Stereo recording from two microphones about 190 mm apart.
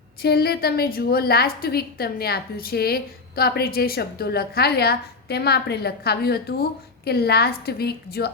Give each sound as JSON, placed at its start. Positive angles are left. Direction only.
{"t": 0.2, "sound": "a woman's voice", "side_deg": 55}